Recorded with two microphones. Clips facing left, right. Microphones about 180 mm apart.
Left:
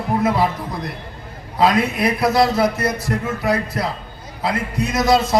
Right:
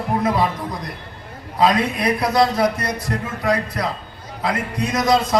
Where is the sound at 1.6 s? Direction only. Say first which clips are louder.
Left 1 dB; 25° left (ahead or behind).